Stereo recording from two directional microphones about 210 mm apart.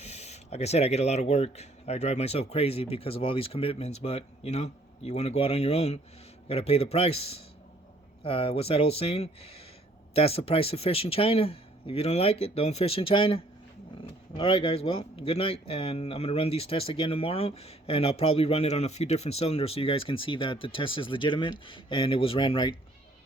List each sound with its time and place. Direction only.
0.0 s speech: 30° left (ahead or behind)